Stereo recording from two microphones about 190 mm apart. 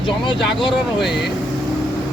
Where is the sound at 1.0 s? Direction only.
Centre (ahead or behind).